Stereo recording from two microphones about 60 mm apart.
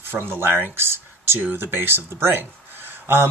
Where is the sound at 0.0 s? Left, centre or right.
Right.